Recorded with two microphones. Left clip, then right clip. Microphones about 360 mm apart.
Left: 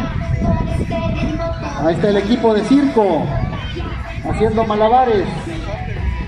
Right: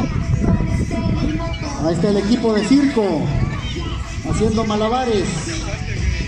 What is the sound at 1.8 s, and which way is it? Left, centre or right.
Speech, left.